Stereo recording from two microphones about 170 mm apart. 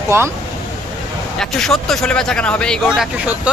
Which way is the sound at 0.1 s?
15° right (ahead or behind).